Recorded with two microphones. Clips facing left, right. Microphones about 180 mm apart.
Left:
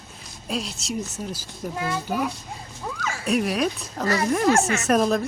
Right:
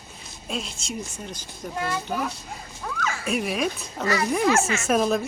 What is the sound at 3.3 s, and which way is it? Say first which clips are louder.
Speech: left 4 dB; centre (ahead or behind).